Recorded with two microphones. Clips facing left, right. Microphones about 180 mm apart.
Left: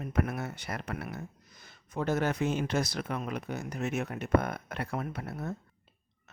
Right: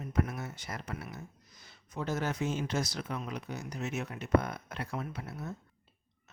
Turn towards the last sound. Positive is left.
turn(degrees=55)  # may be behind; listen again after turning